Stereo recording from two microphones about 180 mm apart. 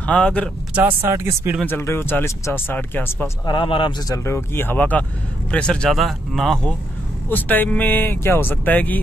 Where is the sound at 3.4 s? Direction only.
25° left (ahead or behind).